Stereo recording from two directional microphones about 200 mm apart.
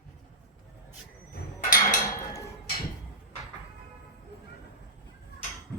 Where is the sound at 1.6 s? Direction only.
45° left (ahead or behind).